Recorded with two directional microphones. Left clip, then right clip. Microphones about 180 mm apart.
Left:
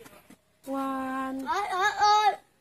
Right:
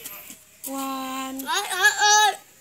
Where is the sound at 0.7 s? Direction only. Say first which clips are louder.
Right 1 dB; 30° right (ahead or behind).